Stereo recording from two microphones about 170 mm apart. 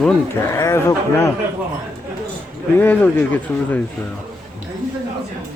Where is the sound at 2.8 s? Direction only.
10° left (ahead or behind).